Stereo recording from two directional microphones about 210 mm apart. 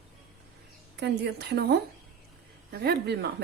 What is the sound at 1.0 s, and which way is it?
Speech, 50° right (ahead or behind).